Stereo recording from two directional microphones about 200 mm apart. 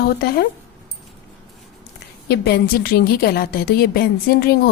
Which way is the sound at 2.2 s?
50° left (ahead or behind).